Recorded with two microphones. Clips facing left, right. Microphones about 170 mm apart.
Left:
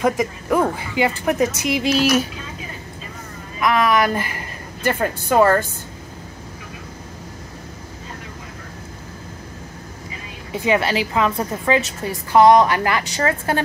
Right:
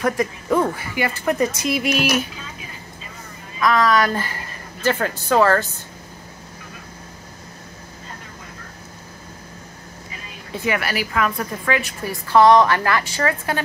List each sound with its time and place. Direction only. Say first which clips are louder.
0.0 s a woman's voice: left 2 dB; 15° left (ahead or behind)
3.5 s speech: even; 15° left (ahead or behind)
10.5 s a woman's voice: left 4 dB; 20° left (ahead or behind)